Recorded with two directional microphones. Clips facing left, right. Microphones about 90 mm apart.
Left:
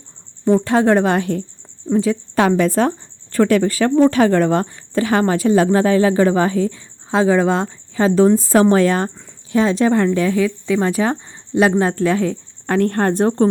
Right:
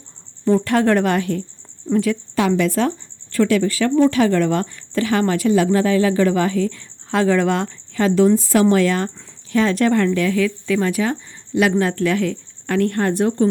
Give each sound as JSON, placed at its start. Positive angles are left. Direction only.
{"t": 0.4, "sound": "a woman's voice", "side_deg": 25}
{"t": 2.3, "sound": "a woman's voice", "side_deg": 40}